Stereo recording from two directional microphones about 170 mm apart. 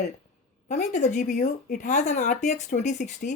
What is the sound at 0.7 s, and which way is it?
Speech, 45° left (ahead or behind).